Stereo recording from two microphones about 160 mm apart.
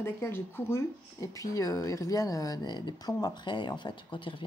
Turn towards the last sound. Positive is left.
turn(degrees=30)  # may be behind; listen again after turning